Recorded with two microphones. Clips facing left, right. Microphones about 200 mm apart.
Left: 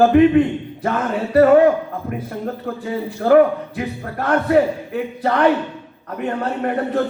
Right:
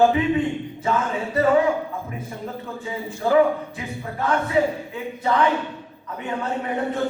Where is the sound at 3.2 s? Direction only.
60° left (ahead or behind).